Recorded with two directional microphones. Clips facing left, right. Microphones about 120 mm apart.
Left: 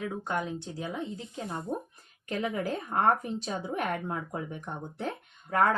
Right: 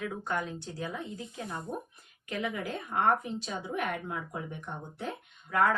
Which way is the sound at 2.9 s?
35° left (ahead or behind).